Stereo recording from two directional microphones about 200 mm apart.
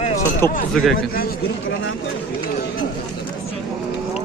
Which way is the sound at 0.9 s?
45° left (ahead or behind).